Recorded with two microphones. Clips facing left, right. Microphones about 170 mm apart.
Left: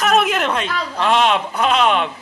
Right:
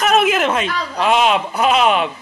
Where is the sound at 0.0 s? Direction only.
Centre (ahead or behind).